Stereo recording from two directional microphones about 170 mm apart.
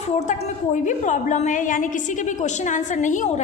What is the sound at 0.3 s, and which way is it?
A woman's voice, 45° left (ahead or behind).